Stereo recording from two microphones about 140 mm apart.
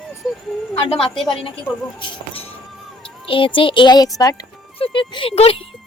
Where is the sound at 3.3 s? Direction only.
40° left (ahead or behind).